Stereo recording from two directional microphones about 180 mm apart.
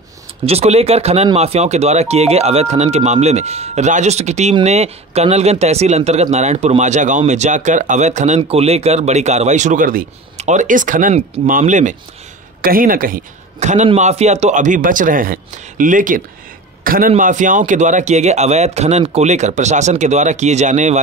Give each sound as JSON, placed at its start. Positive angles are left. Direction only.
{"t": 0.5, "sound": "a man's voice", "side_deg": -35}